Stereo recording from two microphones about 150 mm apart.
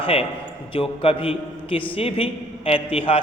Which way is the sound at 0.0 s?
40° left (ahead or behind).